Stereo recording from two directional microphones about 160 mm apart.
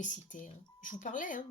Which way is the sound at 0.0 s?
50° left (ahead or behind).